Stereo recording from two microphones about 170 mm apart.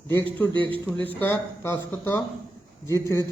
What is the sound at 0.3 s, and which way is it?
Speech, 10° left (ahead or behind).